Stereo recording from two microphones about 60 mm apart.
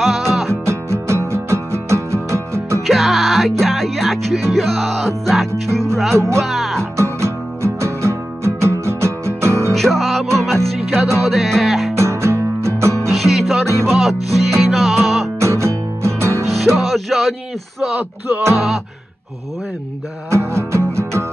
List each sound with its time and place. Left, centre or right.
0.0 s music: centre
0.5 s music: right
2.9 s music: centre
6.1 s speech: right
6.4 s music: centre
6.8 s music: right
9.8 s music: centre
12.0 s music: right
13.1 s music: centre
15.3 s music: right
16.4 s music: centre
18.3 s speech: right
20.2 s music: right